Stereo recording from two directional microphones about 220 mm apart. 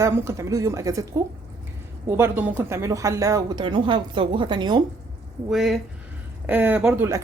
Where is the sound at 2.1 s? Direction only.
10° right (ahead or behind).